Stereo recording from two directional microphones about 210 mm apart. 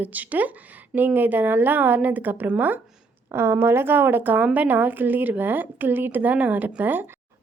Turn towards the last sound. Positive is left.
turn(degrees=-10)  # may be behind; listen again after turning